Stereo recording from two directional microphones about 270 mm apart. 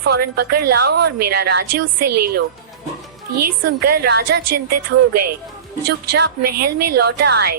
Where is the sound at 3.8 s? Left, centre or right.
Right.